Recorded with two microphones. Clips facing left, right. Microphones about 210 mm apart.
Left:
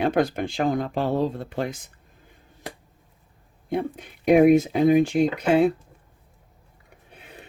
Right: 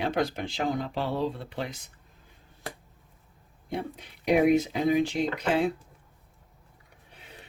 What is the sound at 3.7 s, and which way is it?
Speech, 50° left (ahead or behind).